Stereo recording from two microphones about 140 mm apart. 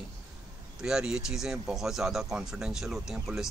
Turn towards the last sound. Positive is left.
turn(degrees=-5)  # may be behind; listen again after turning